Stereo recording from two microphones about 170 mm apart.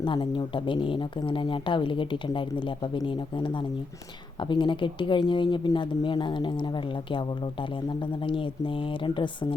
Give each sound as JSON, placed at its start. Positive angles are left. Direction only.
{"t": 0.0, "sound": "speech", "side_deg": 30}
{"t": 8.2, "sound": "speech", "side_deg": 30}